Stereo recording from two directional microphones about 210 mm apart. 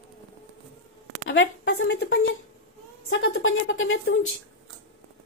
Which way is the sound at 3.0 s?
70° left (ahead or behind).